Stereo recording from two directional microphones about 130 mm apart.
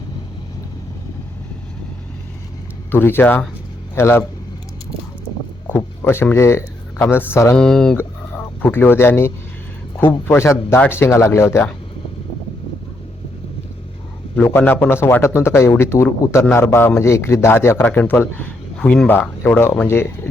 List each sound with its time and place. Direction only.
2.9 s a man's voice: 15° left (ahead or behind)
5.6 s speech: 15° left (ahead or behind)
7.5 s speech: 5° left (ahead or behind)
7.9 s a man's voice: 15° left (ahead or behind)
14.3 s a man's voice: 15° left (ahead or behind)